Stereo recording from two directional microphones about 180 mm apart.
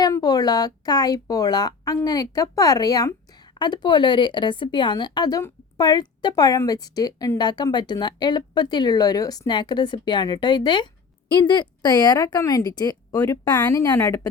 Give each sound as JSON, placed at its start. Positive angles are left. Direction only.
{"t": 0.0, "sound": "speech", "side_deg": 20}